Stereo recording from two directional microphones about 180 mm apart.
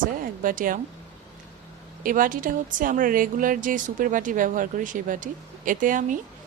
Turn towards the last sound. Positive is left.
turn(degrees=-45)  # may be behind; listen again after turning